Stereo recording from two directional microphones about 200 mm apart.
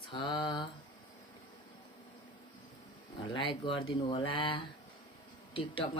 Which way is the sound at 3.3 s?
25° left (ahead or behind).